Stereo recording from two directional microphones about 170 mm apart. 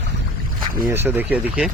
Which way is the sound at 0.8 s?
10° right (ahead or behind).